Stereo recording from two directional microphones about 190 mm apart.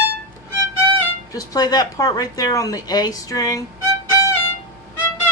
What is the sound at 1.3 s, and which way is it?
Speech, 20° left (ahead or behind).